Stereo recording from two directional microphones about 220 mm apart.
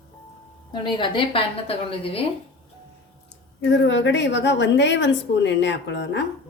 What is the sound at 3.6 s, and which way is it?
A woman's voice, 55° left (ahead or behind).